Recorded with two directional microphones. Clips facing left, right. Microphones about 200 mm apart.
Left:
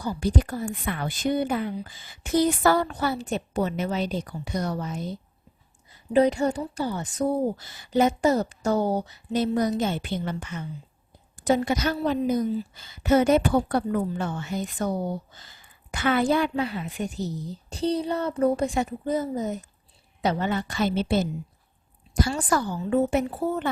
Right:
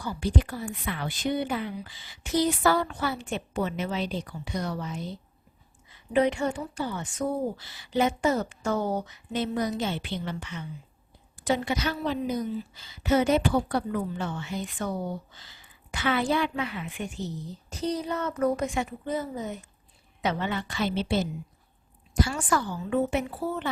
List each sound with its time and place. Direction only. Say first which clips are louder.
0.2 s a woman's voice: left 1 dB; 40° left (ahead or behind)
22.3 s speech: left 3 dB; 35° left (ahead or behind)